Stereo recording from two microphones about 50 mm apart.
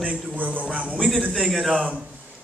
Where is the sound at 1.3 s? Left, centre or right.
Centre.